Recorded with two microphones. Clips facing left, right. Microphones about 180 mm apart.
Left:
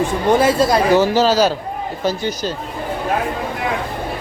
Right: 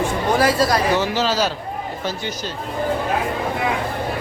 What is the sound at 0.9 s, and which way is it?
Speech, 40° left (ahead or behind).